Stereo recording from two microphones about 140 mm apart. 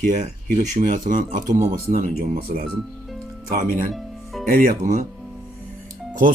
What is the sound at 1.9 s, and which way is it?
Speech, 50° right (ahead or behind).